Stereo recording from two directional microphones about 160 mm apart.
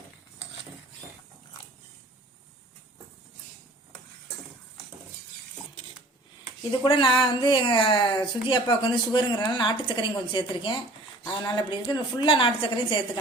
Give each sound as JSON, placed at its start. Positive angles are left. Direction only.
{"t": 6.7, "sound": "speech", "side_deg": 30}
{"t": 11.2, "sound": "speech", "side_deg": 20}
{"t": 11.7, "sound": "speech", "side_deg": 30}